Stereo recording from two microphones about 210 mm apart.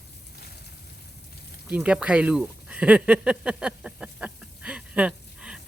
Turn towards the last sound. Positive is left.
turn(degrees=-5)  # may be behind; listen again after turning